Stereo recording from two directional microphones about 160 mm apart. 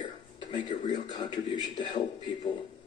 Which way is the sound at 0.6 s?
50° left (ahead or behind).